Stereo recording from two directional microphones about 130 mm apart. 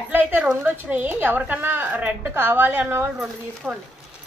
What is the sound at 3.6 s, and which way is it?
Speech, centre (ahead or behind).